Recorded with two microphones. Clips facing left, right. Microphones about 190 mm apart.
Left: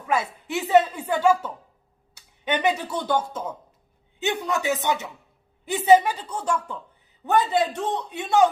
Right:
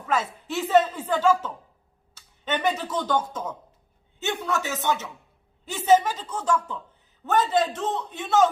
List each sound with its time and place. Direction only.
0.1 s a man's voice: 15° left (ahead or behind)